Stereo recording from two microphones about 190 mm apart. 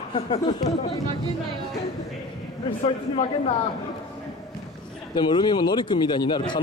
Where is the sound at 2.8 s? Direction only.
35° left (ahead or behind).